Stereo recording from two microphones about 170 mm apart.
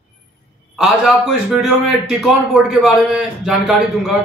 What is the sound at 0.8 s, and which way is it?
Speech, centre (ahead or behind).